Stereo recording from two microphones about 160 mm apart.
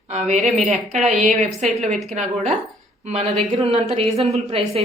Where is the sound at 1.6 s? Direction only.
45° right (ahead or behind).